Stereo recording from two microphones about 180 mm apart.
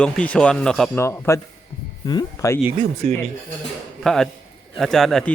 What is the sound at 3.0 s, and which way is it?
Speech, 45° right (ahead or behind).